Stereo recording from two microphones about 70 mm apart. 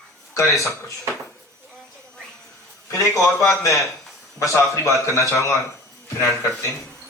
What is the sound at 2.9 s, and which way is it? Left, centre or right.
A man's voice, left.